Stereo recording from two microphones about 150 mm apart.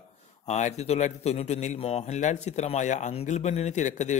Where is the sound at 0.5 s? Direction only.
50° left (ahead or behind).